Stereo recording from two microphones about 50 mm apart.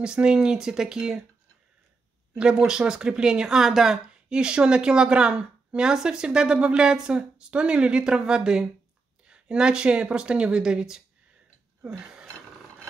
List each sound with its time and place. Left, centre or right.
0.0 s a woman's voice: centre
2.6 s a woman's voice: centre
11.8 s a sound: centre